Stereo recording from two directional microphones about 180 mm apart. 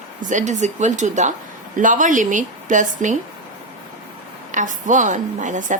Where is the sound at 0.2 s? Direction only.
45° right (ahead or behind).